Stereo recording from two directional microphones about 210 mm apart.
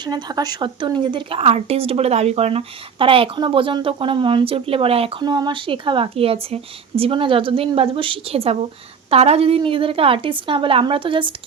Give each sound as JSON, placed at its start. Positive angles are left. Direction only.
{"t": 0.0, "sound": "speech", "side_deg": -20}